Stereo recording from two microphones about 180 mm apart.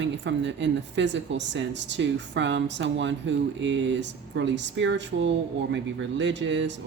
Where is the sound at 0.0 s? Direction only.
85° right.